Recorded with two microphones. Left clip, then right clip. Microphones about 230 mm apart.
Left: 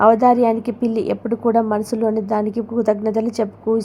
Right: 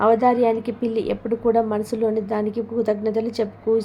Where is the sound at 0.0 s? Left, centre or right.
Centre.